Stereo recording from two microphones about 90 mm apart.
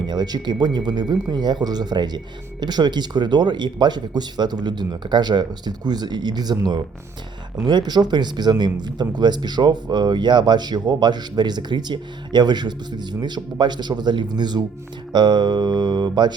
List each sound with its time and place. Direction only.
0.1 s speech: 50° right (ahead or behind)